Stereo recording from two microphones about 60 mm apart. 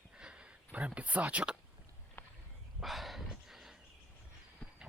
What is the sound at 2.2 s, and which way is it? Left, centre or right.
Walk, left.